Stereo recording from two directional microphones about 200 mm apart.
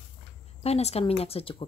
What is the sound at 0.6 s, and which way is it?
Speech, 30° left (ahead or behind).